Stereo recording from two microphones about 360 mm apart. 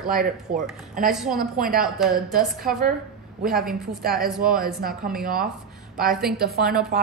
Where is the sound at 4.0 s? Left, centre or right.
Right.